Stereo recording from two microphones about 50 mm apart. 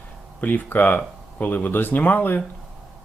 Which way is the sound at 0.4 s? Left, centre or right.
Left.